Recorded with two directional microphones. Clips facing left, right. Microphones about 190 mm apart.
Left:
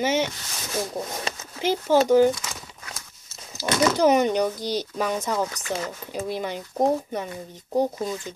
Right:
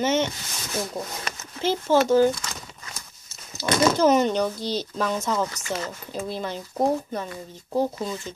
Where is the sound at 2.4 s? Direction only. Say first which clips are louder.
Even; 5° left (ahead or behind).